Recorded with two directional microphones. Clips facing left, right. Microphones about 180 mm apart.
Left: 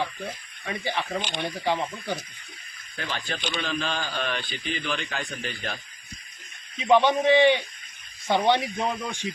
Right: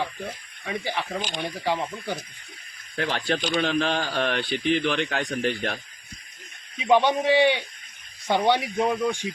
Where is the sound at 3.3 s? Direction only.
40° right (ahead or behind).